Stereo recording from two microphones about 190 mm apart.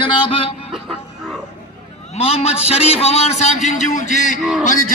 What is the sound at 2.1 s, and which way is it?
A man's voice, 35° left (ahead or behind).